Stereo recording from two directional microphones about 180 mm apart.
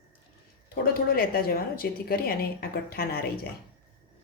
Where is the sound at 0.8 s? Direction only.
55° left (ahead or behind).